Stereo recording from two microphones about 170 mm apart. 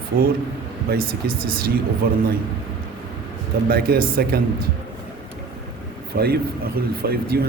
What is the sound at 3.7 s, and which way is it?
Speech, 65° right (ahead or behind).